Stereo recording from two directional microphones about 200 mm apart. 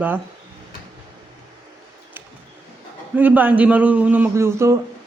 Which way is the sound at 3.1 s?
10° right (ahead or behind).